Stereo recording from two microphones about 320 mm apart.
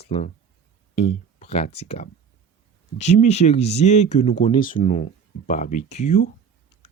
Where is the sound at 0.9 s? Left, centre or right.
Centre.